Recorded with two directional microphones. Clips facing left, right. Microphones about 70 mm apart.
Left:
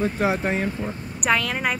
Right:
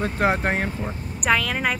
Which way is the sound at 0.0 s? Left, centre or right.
Right.